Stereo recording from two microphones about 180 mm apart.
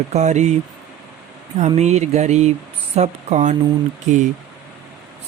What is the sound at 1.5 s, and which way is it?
Speech, 40° right (ahead or behind).